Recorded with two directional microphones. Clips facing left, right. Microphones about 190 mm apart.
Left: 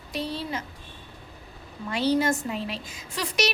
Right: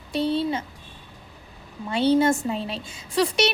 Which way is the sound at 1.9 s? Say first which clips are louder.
Right 4 dB; 25° right (ahead or behind).